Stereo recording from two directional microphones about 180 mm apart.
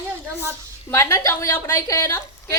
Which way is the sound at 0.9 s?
15° left (ahead or behind).